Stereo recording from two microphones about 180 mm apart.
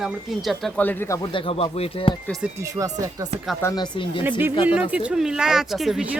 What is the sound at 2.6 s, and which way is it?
Speech, 20° right (ahead or behind).